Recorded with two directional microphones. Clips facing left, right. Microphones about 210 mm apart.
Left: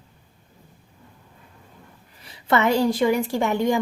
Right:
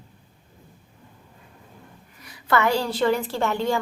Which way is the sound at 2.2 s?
25° left (ahead or behind).